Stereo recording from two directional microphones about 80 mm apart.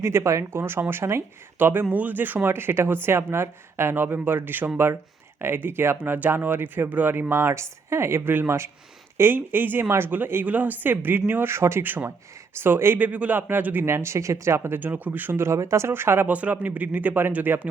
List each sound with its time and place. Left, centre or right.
0.0 s speech: right
13.8 s speech: right